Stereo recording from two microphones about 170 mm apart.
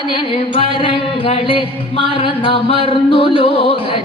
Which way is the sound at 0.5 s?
30° left (ahead or behind).